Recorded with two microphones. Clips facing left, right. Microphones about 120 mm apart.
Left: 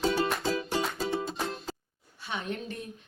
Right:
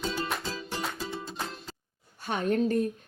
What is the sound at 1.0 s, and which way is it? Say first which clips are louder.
Music: left 6 dB; 60° left (ahead or behind).